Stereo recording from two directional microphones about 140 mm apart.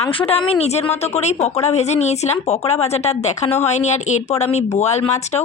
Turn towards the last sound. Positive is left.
turn(degrees=50)  # may be behind; listen again after turning